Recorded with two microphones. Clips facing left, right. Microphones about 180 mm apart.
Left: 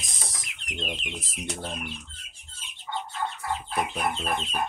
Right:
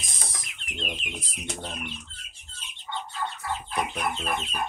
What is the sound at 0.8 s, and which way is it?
Speech, centre (ahead or behind).